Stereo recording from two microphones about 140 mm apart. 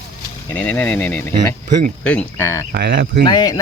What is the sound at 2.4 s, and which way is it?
Speech, 25° left (ahead or behind).